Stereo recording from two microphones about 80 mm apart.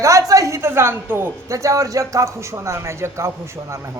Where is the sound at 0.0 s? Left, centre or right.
Right.